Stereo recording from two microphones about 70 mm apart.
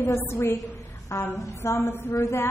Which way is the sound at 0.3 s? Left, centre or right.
Left.